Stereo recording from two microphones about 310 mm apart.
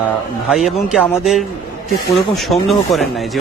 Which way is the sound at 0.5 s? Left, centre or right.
Centre.